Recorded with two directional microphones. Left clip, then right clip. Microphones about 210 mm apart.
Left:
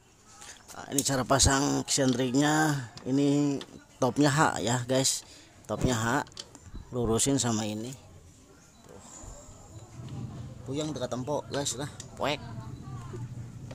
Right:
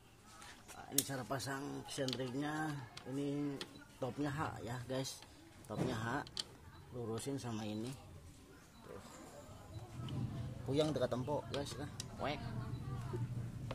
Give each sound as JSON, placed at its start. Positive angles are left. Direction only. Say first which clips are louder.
{"t": 0.7, "sound": "speech", "louder": "left 12 dB", "side_deg": 40}
{"t": 7.0, "sound": "speech", "louder": "left 16 dB", "side_deg": 45}
{"t": 10.7, "sound": "speech", "louder": "left 2 dB", "side_deg": -10}
{"t": 11.0, "sound": "speech", "louder": "left 4 dB", "side_deg": 5}
{"t": 11.2, "sound": "speech", "louder": "left 9 dB", "side_deg": 25}